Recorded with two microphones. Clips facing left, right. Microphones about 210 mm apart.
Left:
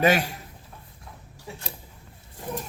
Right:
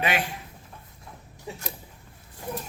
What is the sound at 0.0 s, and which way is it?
Speech, 40° left (ahead or behind).